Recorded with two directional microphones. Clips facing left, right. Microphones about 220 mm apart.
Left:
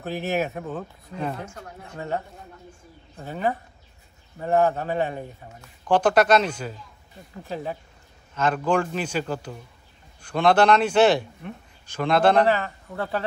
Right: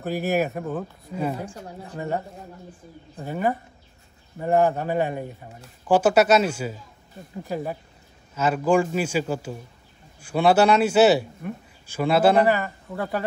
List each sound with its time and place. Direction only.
0.0 s a man's voice: 10° right (ahead or behind)
1.4 s speech: 30° right (ahead or behind)
3.2 s a man's voice: 10° right (ahead or behind)